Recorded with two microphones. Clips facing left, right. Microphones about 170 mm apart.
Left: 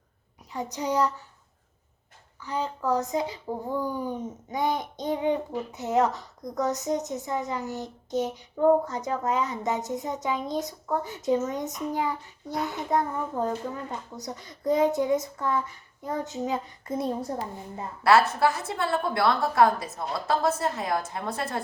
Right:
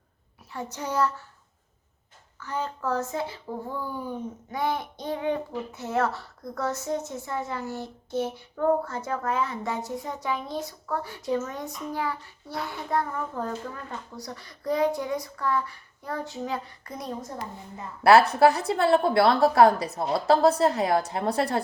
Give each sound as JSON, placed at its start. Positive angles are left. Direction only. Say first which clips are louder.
{"t": 0.5, "sound": "a woman's voice", "louder": "left 2 dB", "side_deg": 15}
{"t": 2.4, "sound": "speech", "louder": "left 1 dB", "side_deg": 15}
{"t": 18.0, "sound": "a woman's voice", "louder": "right 4 dB", "side_deg": -30}